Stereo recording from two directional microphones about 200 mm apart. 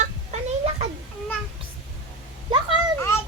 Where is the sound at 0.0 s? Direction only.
35° right (ahead or behind).